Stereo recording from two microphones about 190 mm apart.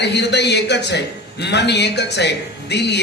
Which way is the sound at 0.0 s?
65° left (ahead or behind).